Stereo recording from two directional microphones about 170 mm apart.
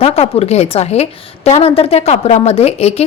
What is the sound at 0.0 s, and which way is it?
A woman's voice, 35° left (ahead or behind).